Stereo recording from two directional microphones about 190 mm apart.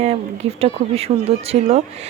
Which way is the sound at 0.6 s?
30° right (ahead or behind).